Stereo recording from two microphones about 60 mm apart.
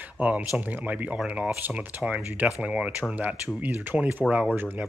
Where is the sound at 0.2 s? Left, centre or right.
Right.